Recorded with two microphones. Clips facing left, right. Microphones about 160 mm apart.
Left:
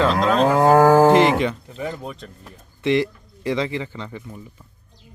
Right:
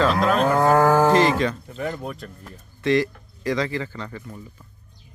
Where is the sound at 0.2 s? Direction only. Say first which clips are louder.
Left 2 dB; 5° right (ahead or behind).